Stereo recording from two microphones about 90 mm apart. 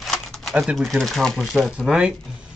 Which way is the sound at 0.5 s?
10° right (ahead or behind).